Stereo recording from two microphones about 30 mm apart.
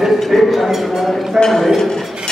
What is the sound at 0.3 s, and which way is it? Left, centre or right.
Speech, centre.